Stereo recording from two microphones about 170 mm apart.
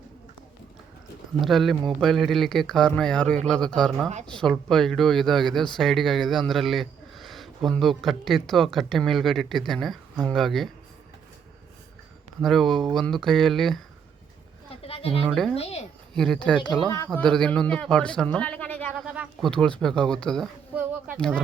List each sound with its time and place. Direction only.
1.4 s speech: centre (ahead or behind)
12.4 s speech: centre (ahead or behind)
14.8 s a sound: 35° left (ahead or behind)
15.2 s speech: centre (ahead or behind)
15.5 s speech: 35° left (ahead or behind)
16.1 s a man's voice: 5° left (ahead or behind)
18.9 s a sound: 10° right (ahead or behind)
19.5 s speech: 5° left (ahead or behind)